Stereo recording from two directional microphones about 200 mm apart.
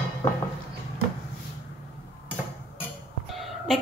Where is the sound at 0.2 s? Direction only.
20° left (ahead or behind).